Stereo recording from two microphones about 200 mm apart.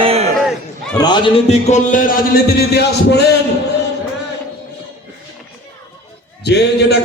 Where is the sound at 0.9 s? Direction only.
20° left (ahead or behind); by 2.1 s 40° left (ahead or behind).